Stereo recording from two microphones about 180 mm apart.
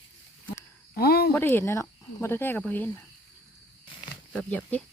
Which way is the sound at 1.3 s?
10° left (ahead or behind).